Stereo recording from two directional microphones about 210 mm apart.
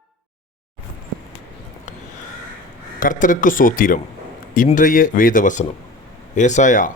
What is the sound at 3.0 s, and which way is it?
Speech, 40° left (ahead or behind).